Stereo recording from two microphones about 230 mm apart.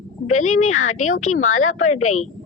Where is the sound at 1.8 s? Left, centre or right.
Left.